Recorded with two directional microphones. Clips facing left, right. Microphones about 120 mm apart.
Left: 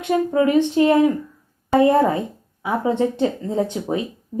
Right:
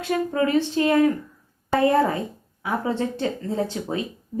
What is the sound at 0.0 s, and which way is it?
A woman's voice, 20° left (ahead or behind).